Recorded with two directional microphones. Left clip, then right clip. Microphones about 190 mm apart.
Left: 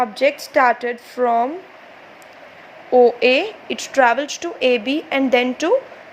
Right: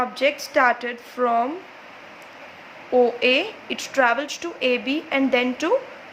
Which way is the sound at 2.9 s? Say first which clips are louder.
Left 5 dB; 25° left (ahead or behind).